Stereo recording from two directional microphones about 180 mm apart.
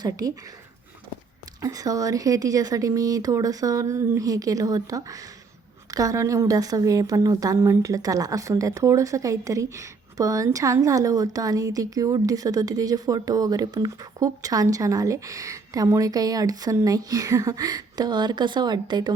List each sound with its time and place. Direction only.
0.0 s a woman's voice: 20° right (ahead or behind)
1.6 s a woman's voice: 20° right (ahead or behind)